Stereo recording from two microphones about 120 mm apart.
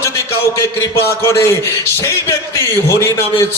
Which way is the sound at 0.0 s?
20° left (ahead or behind).